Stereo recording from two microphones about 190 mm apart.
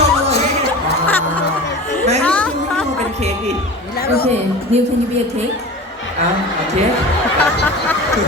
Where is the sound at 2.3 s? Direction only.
5° left (ahead or behind).